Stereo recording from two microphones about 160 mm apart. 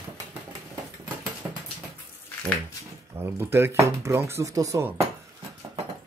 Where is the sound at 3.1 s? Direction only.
15° right (ahead or behind).